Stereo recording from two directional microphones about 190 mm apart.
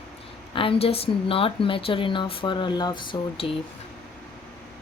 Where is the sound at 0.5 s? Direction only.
30° left (ahead or behind).